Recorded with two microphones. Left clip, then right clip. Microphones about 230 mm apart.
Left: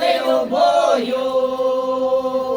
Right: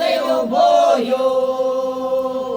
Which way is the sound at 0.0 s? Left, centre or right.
Right.